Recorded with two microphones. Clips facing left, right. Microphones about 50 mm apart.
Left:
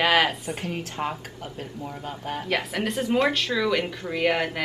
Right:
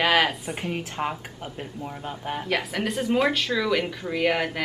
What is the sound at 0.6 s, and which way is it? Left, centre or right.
Speech, centre.